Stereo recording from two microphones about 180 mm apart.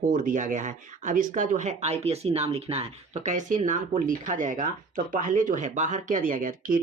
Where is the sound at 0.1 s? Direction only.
45° right (ahead or behind).